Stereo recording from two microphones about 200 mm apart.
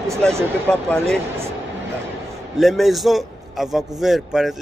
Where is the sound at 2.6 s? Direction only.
Centre (ahead or behind).